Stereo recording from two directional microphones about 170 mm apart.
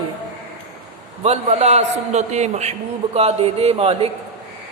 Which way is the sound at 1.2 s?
40° right (ahead or behind).